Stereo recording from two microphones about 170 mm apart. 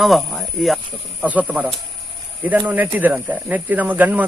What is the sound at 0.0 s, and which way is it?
Speech, centre (ahead or behind).